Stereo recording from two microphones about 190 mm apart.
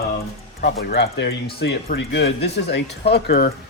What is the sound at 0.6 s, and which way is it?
Speech, 55° left (ahead or behind).